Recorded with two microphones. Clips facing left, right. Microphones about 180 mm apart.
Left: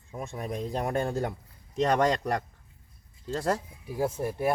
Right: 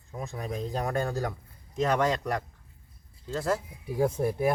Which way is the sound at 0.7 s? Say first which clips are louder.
Left 1 dB; 25° left (ahead or behind).